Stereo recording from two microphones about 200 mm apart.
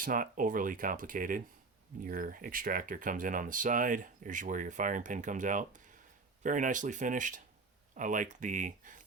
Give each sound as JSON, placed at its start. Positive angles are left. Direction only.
{"t": 0.0, "sound": "speech", "side_deg": -40}